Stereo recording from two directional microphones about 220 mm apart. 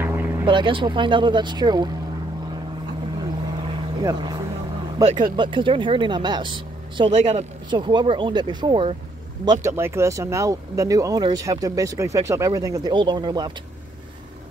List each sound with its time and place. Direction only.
0.0 s vehicle: 10° right (ahead or behind)
0.5 s speech: 20° right (ahead or behind)
3.6 s vehicle: 20° right (ahead or behind)
5.0 s speech: 20° right (ahead or behind)